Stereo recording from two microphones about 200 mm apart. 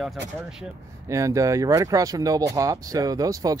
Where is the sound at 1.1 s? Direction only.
15° right (ahead or behind).